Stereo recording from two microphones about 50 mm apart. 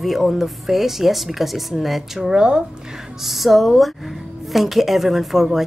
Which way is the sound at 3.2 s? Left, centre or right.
Centre.